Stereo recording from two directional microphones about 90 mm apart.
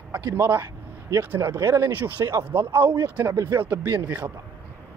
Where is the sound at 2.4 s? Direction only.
25° right (ahead or behind).